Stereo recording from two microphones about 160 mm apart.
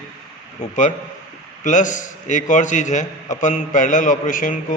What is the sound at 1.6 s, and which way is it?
A man's voice, 50° left (ahead or behind).